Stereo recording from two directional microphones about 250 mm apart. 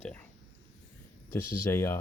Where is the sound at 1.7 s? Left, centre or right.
Centre.